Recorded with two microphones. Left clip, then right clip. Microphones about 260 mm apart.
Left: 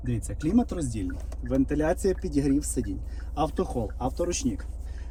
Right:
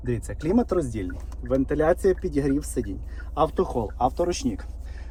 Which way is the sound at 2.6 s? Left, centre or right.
Left.